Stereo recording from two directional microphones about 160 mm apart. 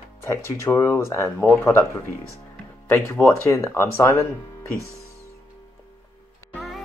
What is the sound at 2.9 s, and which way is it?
Speech, 15° left (ahead or behind).